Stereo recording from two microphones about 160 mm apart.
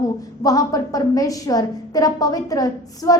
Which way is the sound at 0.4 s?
20° left (ahead or behind).